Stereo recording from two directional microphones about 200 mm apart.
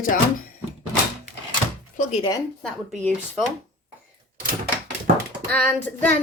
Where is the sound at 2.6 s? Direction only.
Centre (ahead or behind).